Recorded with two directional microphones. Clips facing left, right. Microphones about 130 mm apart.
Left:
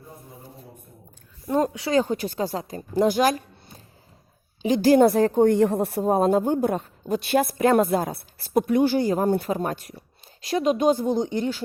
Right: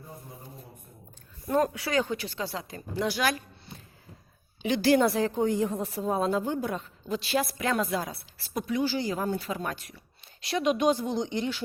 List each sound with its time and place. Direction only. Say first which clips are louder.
1.5 s speech: left 3 dB; 20° left (ahead or behind)
1.9 s a woman's voice: left 6 dB; 40° left (ahead or behind)